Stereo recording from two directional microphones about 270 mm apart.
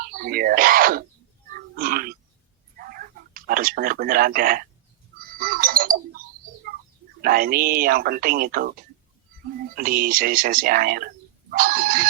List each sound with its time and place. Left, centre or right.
0.0 s speech: right
1.7 s a sound: right
5.3 s clock: right
7.2 s speech: right